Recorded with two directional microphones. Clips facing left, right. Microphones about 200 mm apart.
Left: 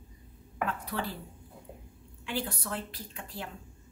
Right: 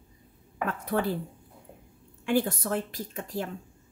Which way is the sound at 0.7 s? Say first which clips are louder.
Right 9 dB; 50° right (ahead or behind).